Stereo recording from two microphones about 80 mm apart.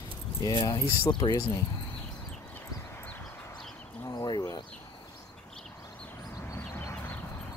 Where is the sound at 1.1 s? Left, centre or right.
Left.